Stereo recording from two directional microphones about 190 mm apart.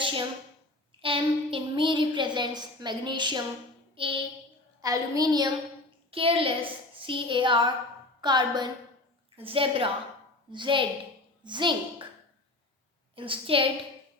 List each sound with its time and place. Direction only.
0.9 s a woman's voice: 30° right (ahead or behind)
3.9 s a sound: 30° right (ahead or behind)
4.8 s a woman's voice: 20° right (ahead or behind)
13.1 s a woman's voice: 25° right (ahead or behind)